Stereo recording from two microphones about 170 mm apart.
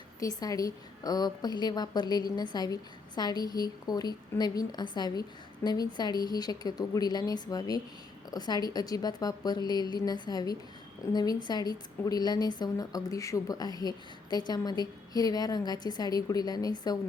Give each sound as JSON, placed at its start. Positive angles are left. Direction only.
{"t": 0.2, "sound": "a woman's voice", "side_deg": 20}